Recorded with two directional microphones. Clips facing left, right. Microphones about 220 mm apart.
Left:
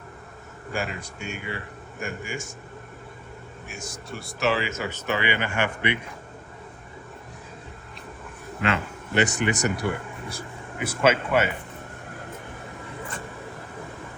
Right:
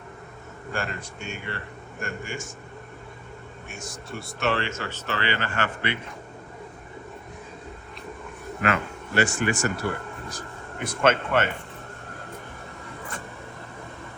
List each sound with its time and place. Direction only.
0.7 s speech: 5° left (ahead or behind)
3.7 s speech: centre (ahead or behind)
4.8 s speech: 15° left (ahead or behind)
8.6 s speech: 25° left (ahead or behind); by 11.5 s 10° left (ahead or behind)